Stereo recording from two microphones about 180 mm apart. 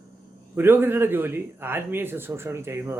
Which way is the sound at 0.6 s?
10° right (ahead or behind).